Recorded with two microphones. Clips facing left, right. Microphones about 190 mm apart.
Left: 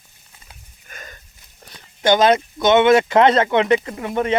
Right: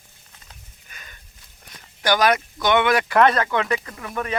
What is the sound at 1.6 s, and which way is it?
Speech, 30° left (ahead or behind).